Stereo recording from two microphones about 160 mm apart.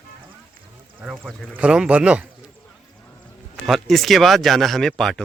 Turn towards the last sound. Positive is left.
turn(degrees=0)  # may be behind; listen again after turning